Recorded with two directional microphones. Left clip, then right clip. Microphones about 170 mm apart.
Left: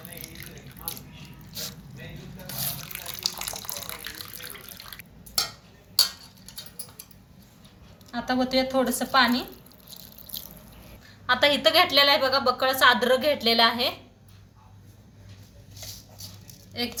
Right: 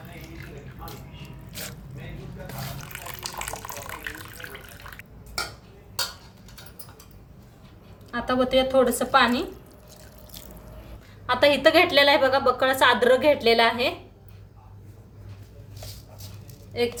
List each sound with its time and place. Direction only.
2.8 s water: 5° right (ahead or behind)
8.1 s speech: 50° right (ahead or behind)
9.3 s drip: 10° right (ahead or behind)
11.3 s a woman's voice: 30° right (ahead or behind)